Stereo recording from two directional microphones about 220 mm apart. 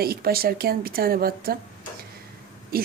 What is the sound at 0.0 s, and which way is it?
Speech, 45° right (ahead or behind).